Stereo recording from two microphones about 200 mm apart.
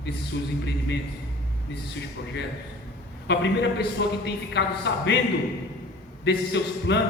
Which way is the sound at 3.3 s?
60° left (ahead or behind).